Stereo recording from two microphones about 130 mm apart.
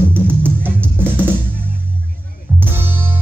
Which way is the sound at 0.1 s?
15° right (ahead or behind).